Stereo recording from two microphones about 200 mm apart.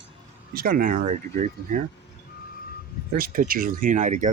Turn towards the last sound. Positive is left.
turn(degrees=-35)  # may be behind; listen again after turning